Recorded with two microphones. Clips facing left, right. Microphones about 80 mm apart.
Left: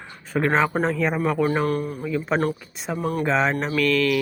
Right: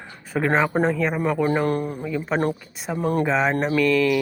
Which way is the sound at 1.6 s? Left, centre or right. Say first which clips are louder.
Right 1 dB; right.